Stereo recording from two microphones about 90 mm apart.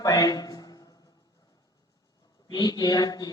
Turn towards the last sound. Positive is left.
turn(degrees=45)  # may be behind; listen again after turning